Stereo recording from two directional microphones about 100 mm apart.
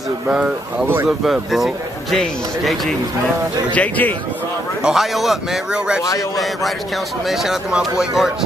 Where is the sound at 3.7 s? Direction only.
15° left (ahead or behind).